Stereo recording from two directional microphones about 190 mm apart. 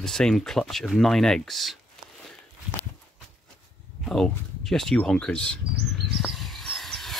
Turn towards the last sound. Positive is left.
turn(degrees=0)  # may be behind; listen again after turning